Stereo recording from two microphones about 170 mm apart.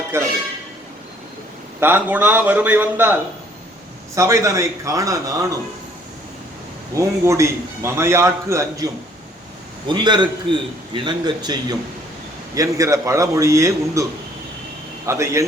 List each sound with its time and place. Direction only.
0.1 s a man's voice: 15° right (ahead or behind)
1.8 s a man's voice: 10° right (ahead or behind)
6.9 s a man's voice: 15° right (ahead or behind)
9.9 s a man's voice: 25° right (ahead or behind)
15.0 s a man's voice: 15° right (ahead or behind)